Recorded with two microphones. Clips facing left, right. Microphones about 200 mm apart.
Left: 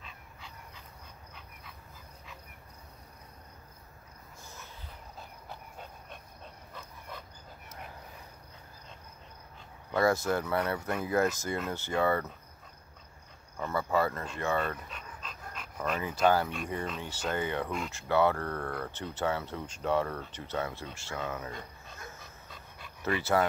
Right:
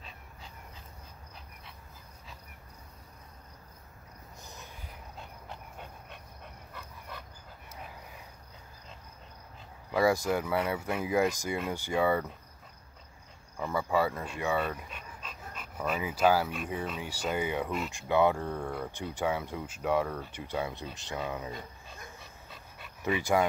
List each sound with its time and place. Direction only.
0.0 s dog: 35° right (ahead or behind)
4.4 s a sound: 15° right (ahead or behind)
9.8 s speech: 10° right (ahead or behind)
13.6 s speech: 10° right (ahead or behind)
17.9 s speech: 15° right (ahead or behind)
21.5 s dog: centre (ahead or behind)
23.0 s speech: 10° right (ahead or behind)